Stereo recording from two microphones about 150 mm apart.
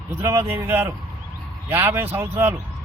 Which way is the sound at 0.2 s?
15° right (ahead or behind).